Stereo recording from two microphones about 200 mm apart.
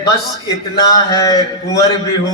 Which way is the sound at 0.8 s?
20° left (ahead or behind).